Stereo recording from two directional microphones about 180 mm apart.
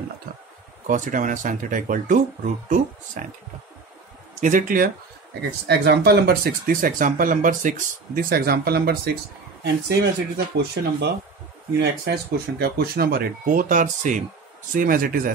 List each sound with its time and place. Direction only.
0.8 s speech: 45° right (ahead or behind)
4.4 s speech: 45° right (ahead or behind)
5.7 s speech: 65° right (ahead or behind)
12.5 s speech: 60° right (ahead or behind)